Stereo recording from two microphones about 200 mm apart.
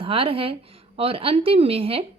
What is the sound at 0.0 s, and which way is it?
A woman's voice, 25° right (ahead or behind).